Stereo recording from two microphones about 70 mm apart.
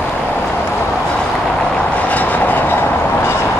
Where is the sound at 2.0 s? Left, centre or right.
Left.